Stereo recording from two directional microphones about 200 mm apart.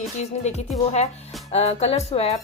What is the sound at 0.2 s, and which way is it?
Speech, 35° left (ahead or behind).